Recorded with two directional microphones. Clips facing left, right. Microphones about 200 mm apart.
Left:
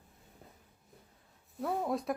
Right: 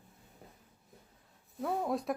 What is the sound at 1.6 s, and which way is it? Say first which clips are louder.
Speech: even; centre (ahead or behind).